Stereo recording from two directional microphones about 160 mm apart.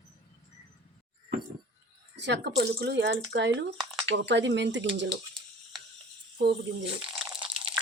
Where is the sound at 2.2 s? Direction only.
90° right.